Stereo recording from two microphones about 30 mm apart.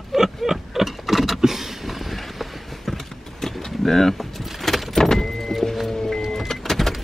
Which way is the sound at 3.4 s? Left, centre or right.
Centre.